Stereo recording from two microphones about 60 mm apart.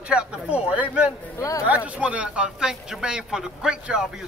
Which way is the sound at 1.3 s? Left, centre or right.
Left.